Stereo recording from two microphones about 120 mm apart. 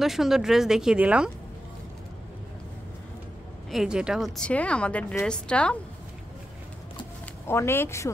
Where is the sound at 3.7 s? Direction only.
5° right (ahead or behind).